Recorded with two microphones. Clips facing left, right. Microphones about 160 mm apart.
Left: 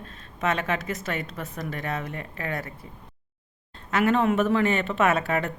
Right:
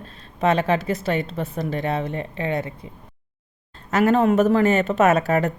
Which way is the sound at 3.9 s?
40° right (ahead or behind).